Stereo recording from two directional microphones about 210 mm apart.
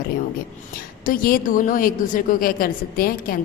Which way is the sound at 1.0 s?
40° left (ahead or behind).